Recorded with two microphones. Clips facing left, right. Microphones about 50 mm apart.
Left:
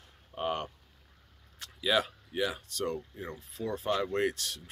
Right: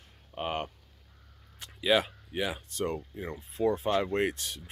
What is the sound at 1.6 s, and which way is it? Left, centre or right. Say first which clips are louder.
Speech: right 3 dB; centre.